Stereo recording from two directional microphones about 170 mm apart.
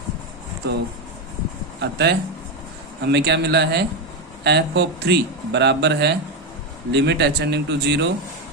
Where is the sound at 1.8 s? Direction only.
75° right (ahead or behind).